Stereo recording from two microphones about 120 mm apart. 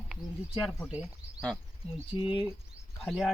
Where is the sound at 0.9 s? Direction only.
10° right (ahead or behind).